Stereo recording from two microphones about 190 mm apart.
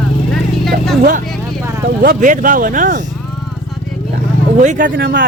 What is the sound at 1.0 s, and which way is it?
Speech, 45° right (ahead or behind).